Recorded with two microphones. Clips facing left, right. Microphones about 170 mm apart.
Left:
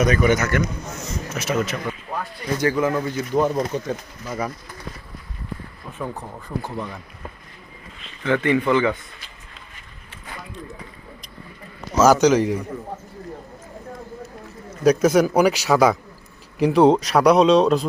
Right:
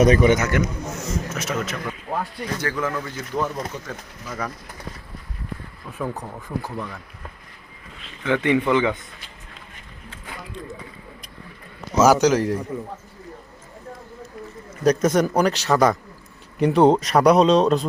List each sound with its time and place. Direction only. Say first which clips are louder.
0.0 s a man's voice: right 3 dB; 30° right (ahead or behind)
1.3 s speech: left 3 dB; centre (ahead or behind)
2.6 s speech: left 7 dB; 20° left (ahead or behind)
6.2 s speech: even; centre (ahead or behind)
8.2 s speech: even; 15° right (ahead or behind)
11.9 s speech: left 1 dB; 10° right (ahead or behind)
14.8 s a man's voice: left 2 dB; 5° left (ahead or behind)